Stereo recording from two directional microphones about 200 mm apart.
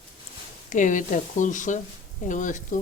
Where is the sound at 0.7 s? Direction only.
40° left (ahead or behind).